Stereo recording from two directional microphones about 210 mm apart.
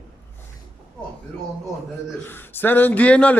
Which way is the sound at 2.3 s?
10° left (ahead or behind).